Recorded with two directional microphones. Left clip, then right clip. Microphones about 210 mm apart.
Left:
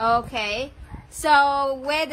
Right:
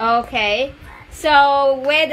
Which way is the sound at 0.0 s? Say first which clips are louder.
Right 5 dB; 25° left (ahead or behind).